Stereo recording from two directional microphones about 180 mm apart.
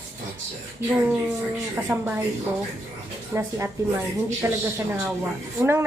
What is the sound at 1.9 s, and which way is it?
Speech, 10° right (ahead or behind).